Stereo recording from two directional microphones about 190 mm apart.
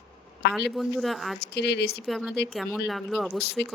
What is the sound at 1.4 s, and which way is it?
Speech, 60° left (ahead or behind).